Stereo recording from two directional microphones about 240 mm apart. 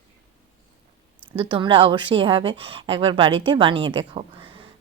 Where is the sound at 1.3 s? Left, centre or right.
Right.